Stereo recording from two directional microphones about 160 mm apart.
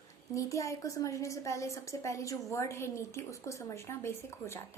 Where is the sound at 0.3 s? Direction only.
20° left (ahead or behind).